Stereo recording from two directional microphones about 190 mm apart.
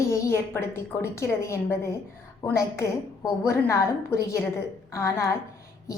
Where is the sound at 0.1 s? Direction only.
15° left (ahead or behind).